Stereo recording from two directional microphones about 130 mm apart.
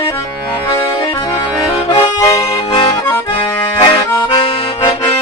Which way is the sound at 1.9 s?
25° left (ahead or behind).